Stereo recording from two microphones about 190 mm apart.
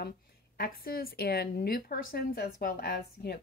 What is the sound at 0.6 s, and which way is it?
A woman's voice, 50° left (ahead or behind).